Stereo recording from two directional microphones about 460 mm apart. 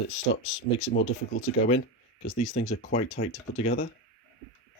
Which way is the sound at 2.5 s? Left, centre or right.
Left.